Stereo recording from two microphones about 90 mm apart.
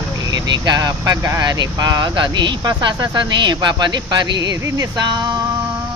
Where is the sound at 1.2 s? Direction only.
35° right (ahead or behind).